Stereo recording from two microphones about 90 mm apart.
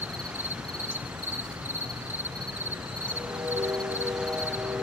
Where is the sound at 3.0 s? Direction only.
15° right (ahead or behind).